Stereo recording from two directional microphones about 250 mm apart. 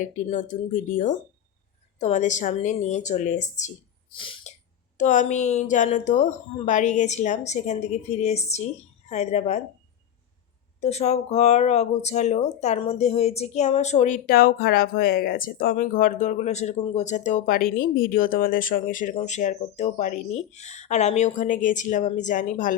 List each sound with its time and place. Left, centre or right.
0.0 s speech: left
4.1 s sneeze: left
4.9 s speech: left
10.8 s speech: left